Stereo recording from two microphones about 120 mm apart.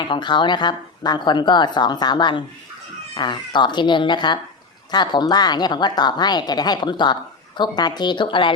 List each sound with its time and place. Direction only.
0.0 s a woman's voice: 40° left (ahead or behind)